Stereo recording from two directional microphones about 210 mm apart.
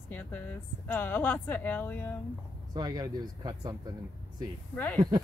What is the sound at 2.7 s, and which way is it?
Speech, 20° right (ahead or behind).